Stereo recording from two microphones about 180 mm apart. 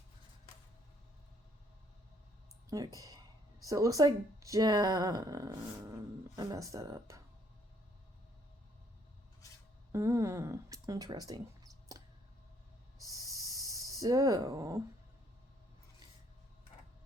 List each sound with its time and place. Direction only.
2.6 s speech: 20° right (ahead or behind)
9.4 s a sound: 20° left (ahead or behind)
9.9 s speech: 15° right (ahead or behind)
13.1 s snake: 20° right (ahead or behind)